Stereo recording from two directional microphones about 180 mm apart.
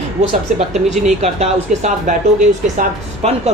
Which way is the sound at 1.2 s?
40° right (ahead or behind).